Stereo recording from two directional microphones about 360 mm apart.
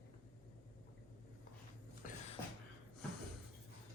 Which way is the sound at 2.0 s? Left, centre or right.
Left.